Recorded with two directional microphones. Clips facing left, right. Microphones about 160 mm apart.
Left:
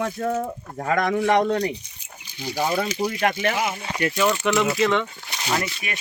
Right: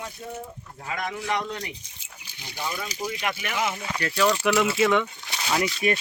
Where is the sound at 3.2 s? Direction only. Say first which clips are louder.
Left 8 dB; 45° left (ahead or behind).